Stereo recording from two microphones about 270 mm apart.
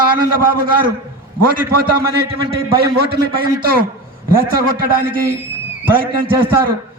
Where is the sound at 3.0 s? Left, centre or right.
Right.